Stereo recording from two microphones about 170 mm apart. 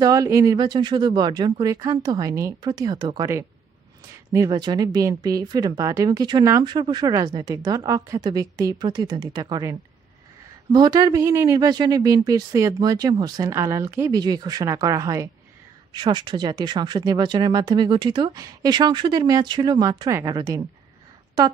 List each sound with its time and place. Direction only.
0.0 s speech: 20° right (ahead or behind)